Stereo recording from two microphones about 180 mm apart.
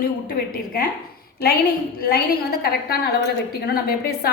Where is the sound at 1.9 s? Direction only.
60° left (ahead or behind).